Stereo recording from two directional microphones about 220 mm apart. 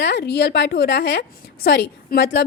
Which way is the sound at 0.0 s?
50° left (ahead or behind).